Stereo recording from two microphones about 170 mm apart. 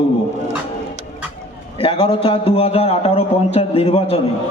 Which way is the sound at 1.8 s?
30° left (ahead or behind).